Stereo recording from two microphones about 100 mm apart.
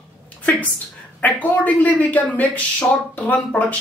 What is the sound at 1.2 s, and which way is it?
Speech, 15° left (ahead or behind).